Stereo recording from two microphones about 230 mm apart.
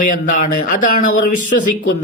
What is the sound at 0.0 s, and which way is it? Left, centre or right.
A man's voice, left.